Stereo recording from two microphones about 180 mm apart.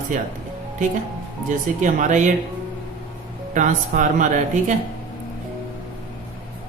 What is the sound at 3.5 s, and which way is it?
Speech, 45° right (ahead or behind).